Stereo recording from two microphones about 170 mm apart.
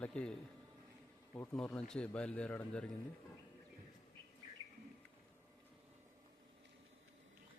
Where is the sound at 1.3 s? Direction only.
15° left (ahead or behind).